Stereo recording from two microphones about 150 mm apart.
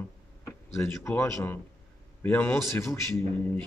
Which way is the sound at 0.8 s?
15° left (ahead or behind).